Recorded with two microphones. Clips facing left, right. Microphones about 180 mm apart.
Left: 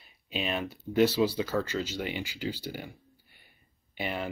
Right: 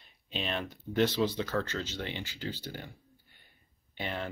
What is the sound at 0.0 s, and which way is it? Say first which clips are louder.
Speech: left 3 dB; 5° left (ahead or behind).